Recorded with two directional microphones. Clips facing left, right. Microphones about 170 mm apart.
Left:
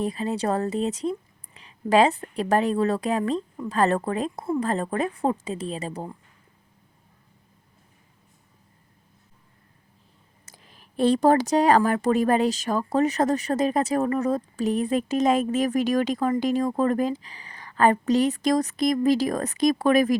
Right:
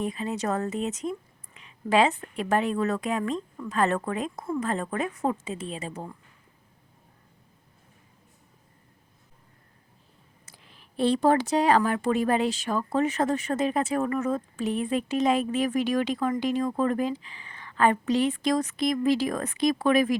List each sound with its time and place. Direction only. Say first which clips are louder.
0.0 s speech: left 3 dB; 35° left (ahead or behind)
10.4 s speech: left 3 dB; 40° left (ahead or behind)